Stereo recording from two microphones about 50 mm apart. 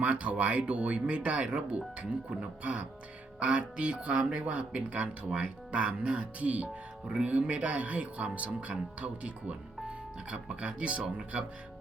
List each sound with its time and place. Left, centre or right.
0.0 s speech: right